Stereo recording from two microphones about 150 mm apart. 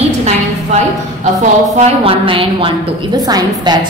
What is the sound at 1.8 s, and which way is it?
A woman's voice, 35° right (ahead or behind).